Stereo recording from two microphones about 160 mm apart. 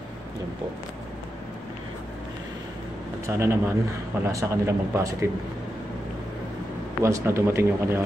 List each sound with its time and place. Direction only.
3.3 s speech: 15° right (ahead or behind)
7.0 s speech: 20° right (ahead or behind)